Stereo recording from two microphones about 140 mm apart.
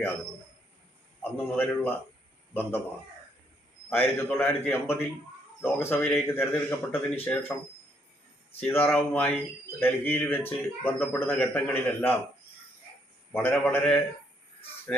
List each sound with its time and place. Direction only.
1.2 s speech: 15° left (ahead or behind)
3.8 s speech: 15° left (ahead or behind)
8.6 s speech: 15° left (ahead or behind)
13.3 s speech: 15° left (ahead or behind)